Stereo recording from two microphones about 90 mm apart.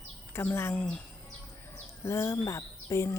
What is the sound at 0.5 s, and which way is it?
Speech, 25° left (ahead or behind).